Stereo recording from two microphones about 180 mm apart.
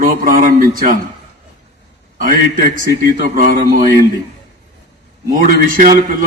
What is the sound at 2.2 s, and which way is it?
A man's voice, 50° right (ahead or behind).